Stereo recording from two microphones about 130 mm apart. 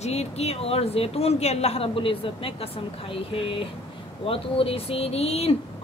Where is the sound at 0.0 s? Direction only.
55° left (ahead or behind).